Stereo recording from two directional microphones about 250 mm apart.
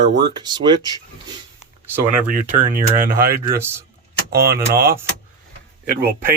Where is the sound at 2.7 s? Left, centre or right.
Right.